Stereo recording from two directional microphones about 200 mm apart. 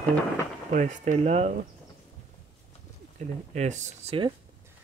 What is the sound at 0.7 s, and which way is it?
Speech, 40° right (ahead or behind).